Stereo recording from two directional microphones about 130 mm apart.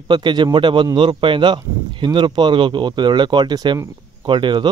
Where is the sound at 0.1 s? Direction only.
35° right (ahead or behind).